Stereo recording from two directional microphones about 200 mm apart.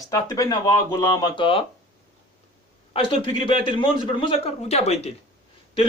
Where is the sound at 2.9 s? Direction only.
30° left (ahead or behind).